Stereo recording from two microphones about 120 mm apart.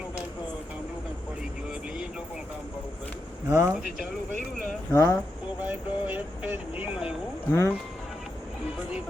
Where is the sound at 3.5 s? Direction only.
25° right (ahead or behind).